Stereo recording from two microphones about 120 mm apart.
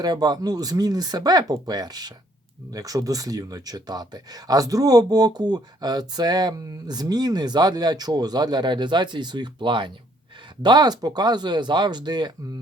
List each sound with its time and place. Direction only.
0.0 s speech: 35° right (ahead or behind)